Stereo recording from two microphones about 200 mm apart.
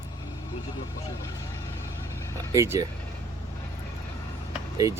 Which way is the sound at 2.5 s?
15° right (ahead or behind).